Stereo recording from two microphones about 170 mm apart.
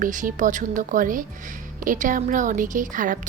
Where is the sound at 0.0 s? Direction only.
50° right (ahead or behind).